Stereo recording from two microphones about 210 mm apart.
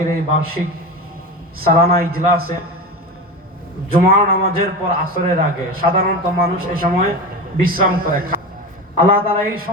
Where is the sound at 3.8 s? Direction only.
45° right (ahead or behind).